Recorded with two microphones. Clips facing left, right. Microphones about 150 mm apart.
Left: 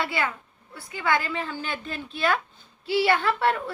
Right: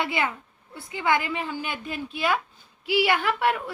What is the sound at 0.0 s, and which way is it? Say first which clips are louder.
A woman's voice: right 1 dB; 20° right (ahead or behind).